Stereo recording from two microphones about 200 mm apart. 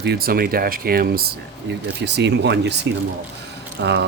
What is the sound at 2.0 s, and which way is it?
Speech, 60° right (ahead or behind).